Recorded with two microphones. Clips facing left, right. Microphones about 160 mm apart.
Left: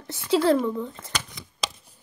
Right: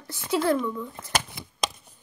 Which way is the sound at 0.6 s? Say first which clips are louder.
Left 3 dB; 50° left (ahead or behind).